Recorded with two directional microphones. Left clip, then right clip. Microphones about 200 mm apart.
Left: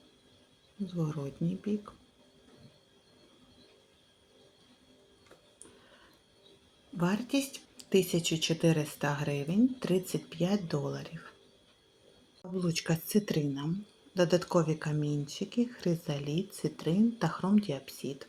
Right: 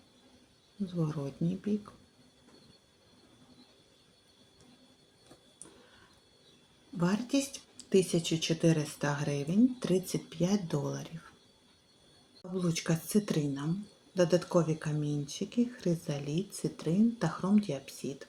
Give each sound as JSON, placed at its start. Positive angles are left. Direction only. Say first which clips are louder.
{"t": 0.9, "sound": "speech", "louder": "right 1 dB", "side_deg": 0}
{"t": 6.9, "sound": "speech", "louder": "even", "side_deg": 0}
{"t": 12.4, "sound": "speech", "louder": "even", "side_deg": 5}